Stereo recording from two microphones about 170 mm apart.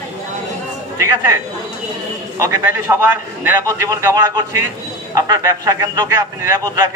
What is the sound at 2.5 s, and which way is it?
A man's voice, 15° right (ahead or behind).